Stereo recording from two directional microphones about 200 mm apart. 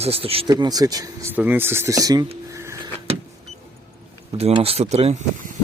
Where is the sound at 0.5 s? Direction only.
20° right (ahead or behind).